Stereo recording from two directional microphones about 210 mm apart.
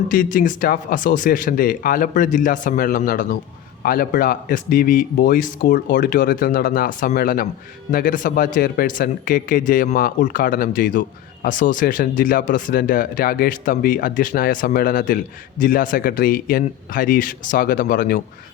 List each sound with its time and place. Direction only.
0.1 s speech: 40° left (ahead or behind)